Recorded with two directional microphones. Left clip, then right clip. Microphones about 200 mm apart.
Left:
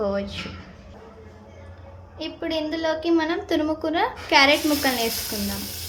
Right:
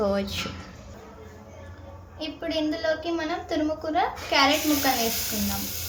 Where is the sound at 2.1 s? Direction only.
25° left (ahead or behind).